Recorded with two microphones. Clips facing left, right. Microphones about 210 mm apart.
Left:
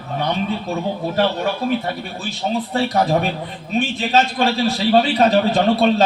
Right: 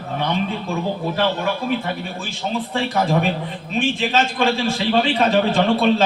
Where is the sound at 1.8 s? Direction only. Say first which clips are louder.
Left 1 dB; 40° left (ahead or behind).